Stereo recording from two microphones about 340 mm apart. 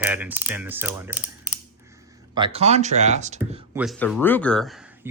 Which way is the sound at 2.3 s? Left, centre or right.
Centre.